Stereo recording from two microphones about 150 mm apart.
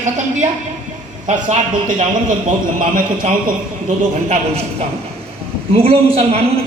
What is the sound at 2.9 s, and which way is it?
Speech, 65° right (ahead or behind).